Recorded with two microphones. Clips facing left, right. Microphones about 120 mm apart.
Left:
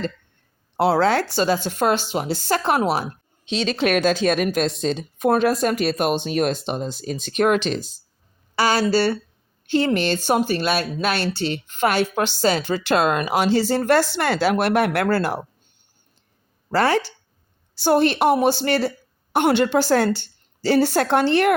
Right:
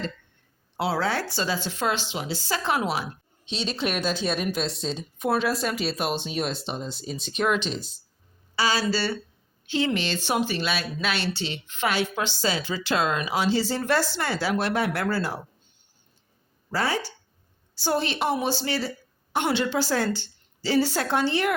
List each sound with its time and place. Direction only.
0.8 s speech: 65° left (ahead or behind); by 3.2 s 45° left (ahead or behind)
3.4 s speech: 90° left; by 15.4 s 65° left (ahead or behind)
16.7 s speech: 75° left (ahead or behind)
17.7 s speech: 60° left (ahead or behind)